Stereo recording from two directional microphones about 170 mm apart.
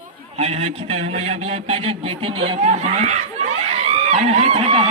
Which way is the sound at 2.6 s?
40° right (ahead or behind).